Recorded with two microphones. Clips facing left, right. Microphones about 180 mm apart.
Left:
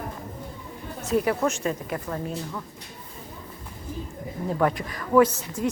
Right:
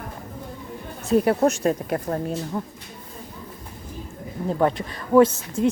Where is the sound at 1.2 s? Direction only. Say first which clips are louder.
Right 5 dB; 35° right (ahead or behind).